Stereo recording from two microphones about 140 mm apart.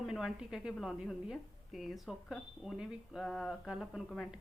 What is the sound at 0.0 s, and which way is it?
A woman's voice, 5° right (ahead or behind).